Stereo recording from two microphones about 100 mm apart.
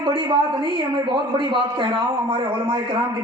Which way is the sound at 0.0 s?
50° right (ahead or behind).